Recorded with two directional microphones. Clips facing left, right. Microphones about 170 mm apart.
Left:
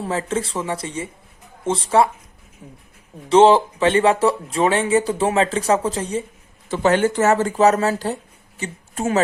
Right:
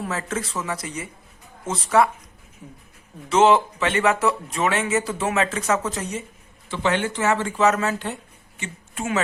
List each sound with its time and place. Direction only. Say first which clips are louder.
0.0 s speech: left 5 dB; 30° left (ahead or behind)
6.7 s speech: left 6 dB; 40° left (ahead or behind)